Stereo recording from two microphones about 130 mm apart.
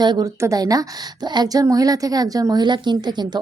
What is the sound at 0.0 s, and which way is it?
A woman's voice, 35° right (ahead or behind).